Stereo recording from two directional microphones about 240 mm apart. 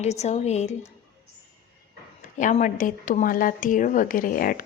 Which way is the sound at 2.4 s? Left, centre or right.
Left.